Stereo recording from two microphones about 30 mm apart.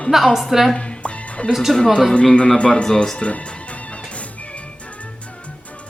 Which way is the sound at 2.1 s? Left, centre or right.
Left.